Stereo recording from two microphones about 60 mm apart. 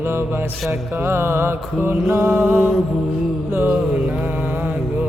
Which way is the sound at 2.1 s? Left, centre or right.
Right.